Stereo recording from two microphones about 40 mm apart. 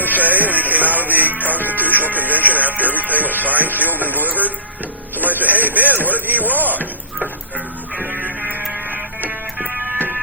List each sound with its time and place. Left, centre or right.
0.0 s music: right
2.6 s speech: right
8.1 s music: right